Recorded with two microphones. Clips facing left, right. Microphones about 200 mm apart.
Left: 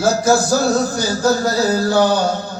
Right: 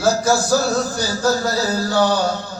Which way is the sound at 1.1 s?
20° left (ahead or behind).